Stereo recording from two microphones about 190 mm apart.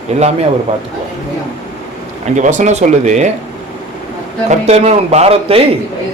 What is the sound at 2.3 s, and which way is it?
Speech, 40° right (ahead or behind).